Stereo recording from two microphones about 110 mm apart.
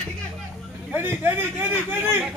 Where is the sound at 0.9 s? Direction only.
20° right (ahead or behind).